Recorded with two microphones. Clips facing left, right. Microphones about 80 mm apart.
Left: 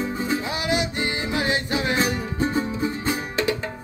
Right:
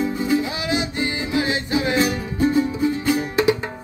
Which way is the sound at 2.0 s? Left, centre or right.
Left.